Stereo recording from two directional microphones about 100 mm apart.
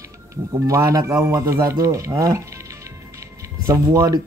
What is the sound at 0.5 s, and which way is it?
Speech, 30° right (ahead or behind).